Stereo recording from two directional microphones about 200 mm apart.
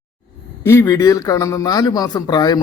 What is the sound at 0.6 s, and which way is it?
A man's voice, 15° left (ahead or behind).